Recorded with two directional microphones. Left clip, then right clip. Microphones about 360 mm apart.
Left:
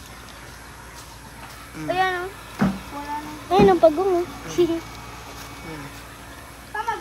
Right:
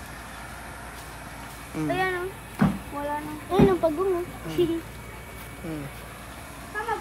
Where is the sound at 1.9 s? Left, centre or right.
Left.